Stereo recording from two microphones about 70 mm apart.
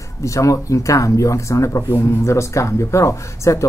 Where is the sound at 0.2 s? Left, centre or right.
Left.